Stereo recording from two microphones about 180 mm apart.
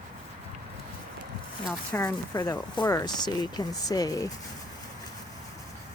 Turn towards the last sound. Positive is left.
turn(degrees=20)  # may be behind; listen again after turning